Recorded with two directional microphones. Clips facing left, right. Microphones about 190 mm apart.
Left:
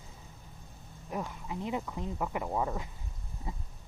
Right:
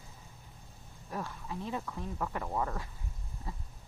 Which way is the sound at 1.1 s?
15° left (ahead or behind).